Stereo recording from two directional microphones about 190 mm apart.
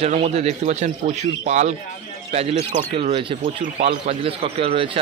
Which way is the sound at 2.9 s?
30° right (ahead or behind).